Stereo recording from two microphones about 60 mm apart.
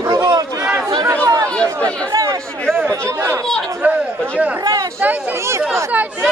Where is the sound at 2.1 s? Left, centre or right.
Right.